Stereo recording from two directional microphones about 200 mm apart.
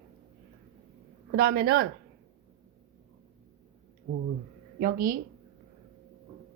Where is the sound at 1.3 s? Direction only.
50° right (ahead or behind).